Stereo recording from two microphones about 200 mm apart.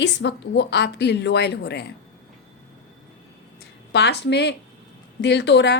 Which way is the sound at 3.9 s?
55° left (ahead or behind).